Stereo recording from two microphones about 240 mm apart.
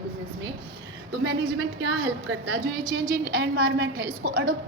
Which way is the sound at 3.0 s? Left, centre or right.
Right.